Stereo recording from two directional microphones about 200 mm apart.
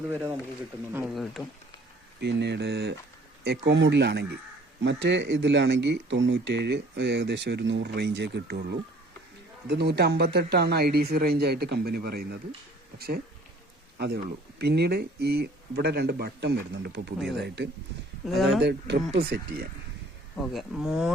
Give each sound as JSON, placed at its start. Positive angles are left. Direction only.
{"t": 0.1, "sound": "speech", "side_deg": -10}
{"t": 2.2, "sound": "speech", "side_deg": -60}
{"t": 9.6, "sound": "speech", "side_deg": -55}
{"t": 14.6, "sound": "speech", "side_deg": -55}
{"t": 18.3, "sound": "speech", "side_deg": 0}
{"t": 18.6, "sound": "speech", "side_deg": -55}
{"t": 20.3, "sound": "speech", "side_deg": 0}